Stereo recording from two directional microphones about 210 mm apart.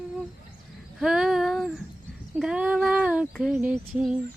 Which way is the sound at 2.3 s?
5° right (ahead or behind).